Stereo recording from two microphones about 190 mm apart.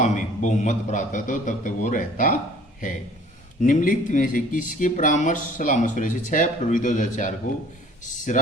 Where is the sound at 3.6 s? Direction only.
45° left (ahead or behind).